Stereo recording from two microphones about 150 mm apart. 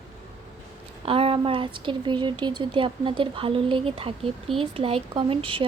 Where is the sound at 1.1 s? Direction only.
40° right (ahead or behind).